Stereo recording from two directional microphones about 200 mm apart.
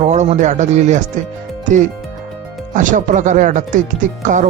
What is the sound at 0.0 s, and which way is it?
Speech, 35° right (ahead or behind).